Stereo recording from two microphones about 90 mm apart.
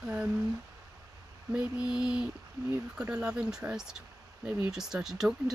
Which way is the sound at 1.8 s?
10° right (ahead or behind).